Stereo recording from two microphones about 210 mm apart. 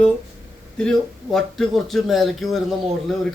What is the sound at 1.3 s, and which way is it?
Speech, centre (ahead or behind).